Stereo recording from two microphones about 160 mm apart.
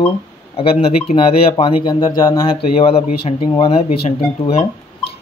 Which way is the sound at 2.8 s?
35° left (ahead or behind).